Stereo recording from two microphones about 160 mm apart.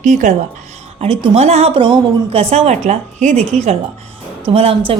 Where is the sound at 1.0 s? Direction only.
40° right (ahead or behind).